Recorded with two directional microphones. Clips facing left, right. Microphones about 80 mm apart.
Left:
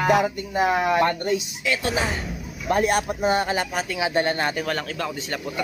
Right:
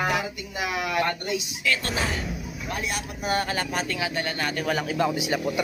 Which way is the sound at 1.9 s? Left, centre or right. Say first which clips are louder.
Left 3 dB; centre.